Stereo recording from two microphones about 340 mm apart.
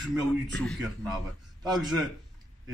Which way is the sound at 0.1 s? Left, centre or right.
Centre.